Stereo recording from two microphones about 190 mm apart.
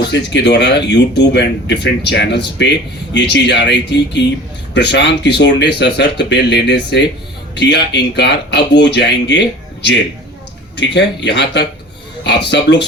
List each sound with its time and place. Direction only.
0.1 s speech: 65° left (ahead or behind)
10.8 s speech: 65° left (ahead or behind)